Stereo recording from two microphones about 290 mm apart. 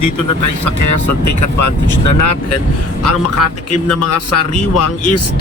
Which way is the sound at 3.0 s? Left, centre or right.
Left.